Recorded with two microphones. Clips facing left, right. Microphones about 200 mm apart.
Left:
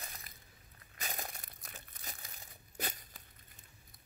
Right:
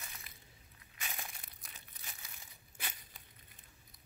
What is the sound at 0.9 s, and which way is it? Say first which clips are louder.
Crumpling: left 4 dB; 40° left (ahead or behind).